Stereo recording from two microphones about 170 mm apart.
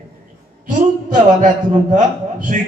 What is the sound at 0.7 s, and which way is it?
A man's voice, 50° right (ahead or behind).